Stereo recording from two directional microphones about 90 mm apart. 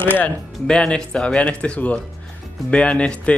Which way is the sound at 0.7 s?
10° left (ahead or behind).